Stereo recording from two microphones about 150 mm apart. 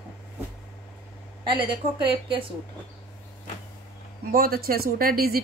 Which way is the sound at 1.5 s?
35° right (ahead or behind).